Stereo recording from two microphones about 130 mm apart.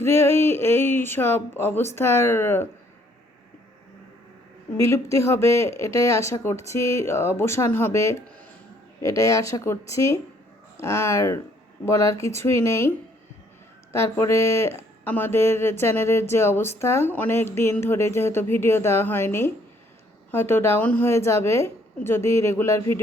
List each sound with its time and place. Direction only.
0.0 s speech: 20° left (ahead or behind)
4.8 s speech: 20° left (ahead or behind)
13.9 s speech: 20° left (ahead or behind)